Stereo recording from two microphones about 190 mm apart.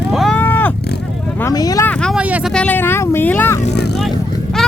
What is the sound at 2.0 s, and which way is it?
Vehicle, 5° right (ahead or behind).